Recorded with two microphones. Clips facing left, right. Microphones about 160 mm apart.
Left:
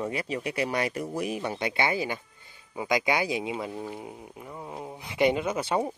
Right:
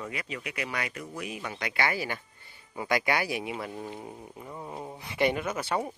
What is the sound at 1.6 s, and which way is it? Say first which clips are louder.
Speech: left 1 dB; 25° left (ahead or behind).